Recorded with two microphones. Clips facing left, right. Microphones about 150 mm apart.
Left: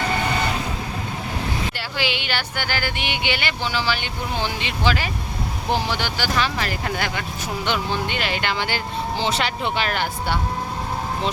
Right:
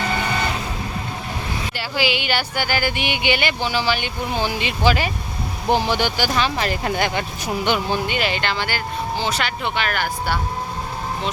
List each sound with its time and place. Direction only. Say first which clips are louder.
2.0 s speech: right 5 dB; 10° right (ahead or behind)
7.6 s speech: right 3 dB; 15° right (ahead or behind)
8.4 s speech: right 1 dB; 15° left (ahead or behind)